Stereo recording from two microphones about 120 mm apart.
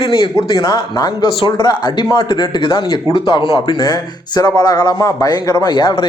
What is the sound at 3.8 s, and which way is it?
Speech, 30° left (ahead or behind).